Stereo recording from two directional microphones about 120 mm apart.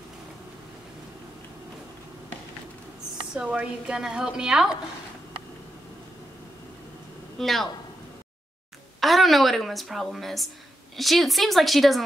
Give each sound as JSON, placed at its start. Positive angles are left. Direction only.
{"t": 3.3, "sound": "a woman's voice", "side_deg": -10}
{"t": 7.3, "sound": "speech", "side_deg": 0}
{"t": 9.0, "sound": "a woman's voice", "side_deg": 0}